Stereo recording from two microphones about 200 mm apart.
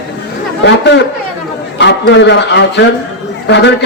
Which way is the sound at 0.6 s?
60° left (ahead or behind).